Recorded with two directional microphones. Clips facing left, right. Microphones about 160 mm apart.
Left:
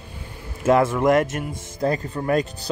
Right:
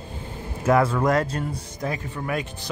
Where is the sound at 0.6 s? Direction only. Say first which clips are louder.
Left 2 dB; 25° left (ahead or behind).